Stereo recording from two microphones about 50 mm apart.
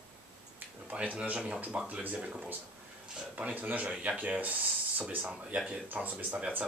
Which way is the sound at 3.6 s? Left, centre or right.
Right.